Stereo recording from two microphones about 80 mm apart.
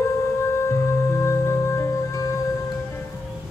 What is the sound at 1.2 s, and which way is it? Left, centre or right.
Music, left.